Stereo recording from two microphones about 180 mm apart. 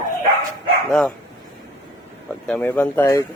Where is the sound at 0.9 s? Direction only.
5° left (ahead or behind).